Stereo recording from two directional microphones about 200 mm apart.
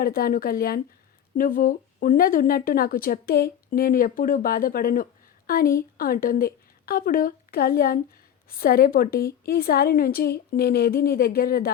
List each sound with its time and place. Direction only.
0.0 s a woman's voice: 50° left (ahead or behind)